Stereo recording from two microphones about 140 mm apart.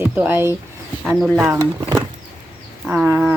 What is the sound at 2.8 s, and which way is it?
Speech, 15° right (ahead or behind).